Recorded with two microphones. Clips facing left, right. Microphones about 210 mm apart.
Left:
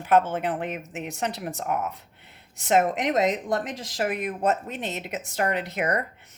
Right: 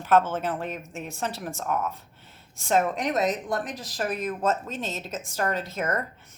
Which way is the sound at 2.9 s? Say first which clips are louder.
Left 2 dB; 90° left.